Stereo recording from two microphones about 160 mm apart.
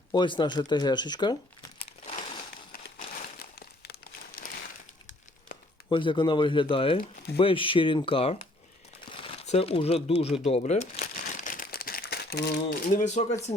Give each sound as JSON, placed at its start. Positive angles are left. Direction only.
{"t": 0.1, "sound": "speech", "side_deg": 30}
{"t": 4.4, "sound": "a sound", "side_deg": 55}
{"t": 5.9, "sound": "speech", "side_deg": 30}
{"t": 9.0, "sound": "crumpling", "side_deg": 35}